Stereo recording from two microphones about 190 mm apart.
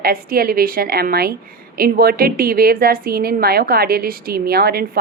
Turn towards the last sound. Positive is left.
turn(degrees=-55)  # may be behind; listen again after turning